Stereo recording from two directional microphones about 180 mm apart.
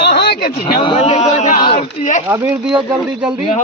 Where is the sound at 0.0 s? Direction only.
65° left (ahead or behind).